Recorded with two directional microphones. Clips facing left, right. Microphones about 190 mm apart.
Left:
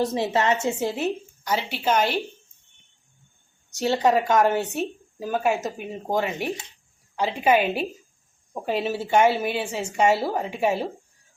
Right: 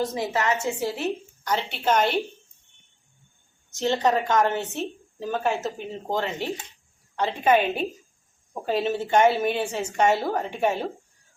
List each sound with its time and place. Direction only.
0.0 s a woman's voice: 25° left (ahead or behind)
1.5 s a woman's voice: 5° left (ahead or behind)
3.8 s speech: 10° left (ahead or behind)
8.7 s a woman's voice: 5° left (ahead or behind)